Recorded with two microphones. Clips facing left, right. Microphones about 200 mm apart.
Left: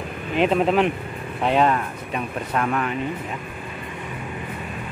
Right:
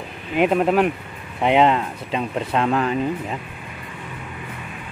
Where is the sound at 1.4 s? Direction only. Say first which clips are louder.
Right 3 dB; 20° right (ahead or behind).